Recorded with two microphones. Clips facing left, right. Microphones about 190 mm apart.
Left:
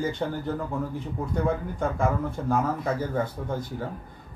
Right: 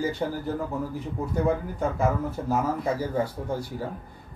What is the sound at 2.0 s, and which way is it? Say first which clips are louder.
Speech: right 1 dB; 10° right (ahead or behind).